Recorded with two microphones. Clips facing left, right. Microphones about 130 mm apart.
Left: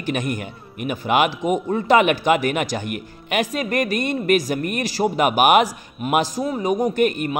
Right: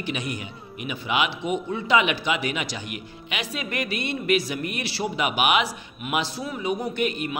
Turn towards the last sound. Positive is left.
turn(degrees=50)  # may be behind; listen again after turning